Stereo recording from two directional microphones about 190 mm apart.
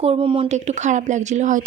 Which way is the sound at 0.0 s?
30° right (ahead or behind).